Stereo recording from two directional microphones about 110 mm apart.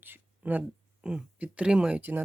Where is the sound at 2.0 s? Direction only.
20° right (ahead or behind).